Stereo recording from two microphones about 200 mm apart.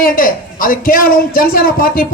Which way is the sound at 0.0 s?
45° left (ahead or behind).